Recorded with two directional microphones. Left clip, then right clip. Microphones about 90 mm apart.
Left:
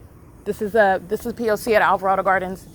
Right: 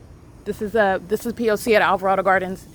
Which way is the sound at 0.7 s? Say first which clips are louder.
Left 2 dB; 25° right (ahead or behind).